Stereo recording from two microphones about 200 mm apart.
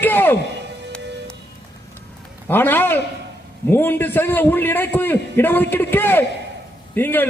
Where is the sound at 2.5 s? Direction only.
10° left (ahead or behind).